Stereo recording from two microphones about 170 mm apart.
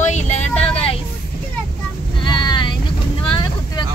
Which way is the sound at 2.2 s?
25° left (ahead or behind).